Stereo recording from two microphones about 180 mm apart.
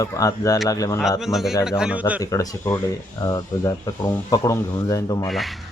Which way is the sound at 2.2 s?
20° left (ahead or behind).